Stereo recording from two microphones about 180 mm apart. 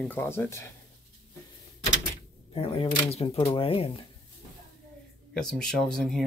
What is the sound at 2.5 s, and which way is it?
Speech, 30° left (ahead or behind).